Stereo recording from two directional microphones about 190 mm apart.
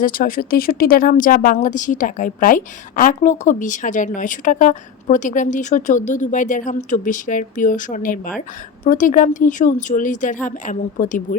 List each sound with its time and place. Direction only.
0.0 s speech: 50° left (ahead or behind)